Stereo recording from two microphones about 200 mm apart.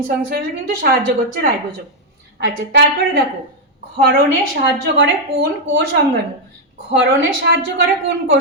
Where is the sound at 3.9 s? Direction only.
45° right (ahead or behind).